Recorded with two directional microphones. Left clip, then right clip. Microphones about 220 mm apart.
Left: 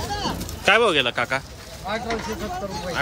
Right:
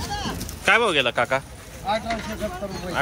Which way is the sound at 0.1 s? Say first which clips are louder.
Left 3 dB; 45° left (ahead or behind).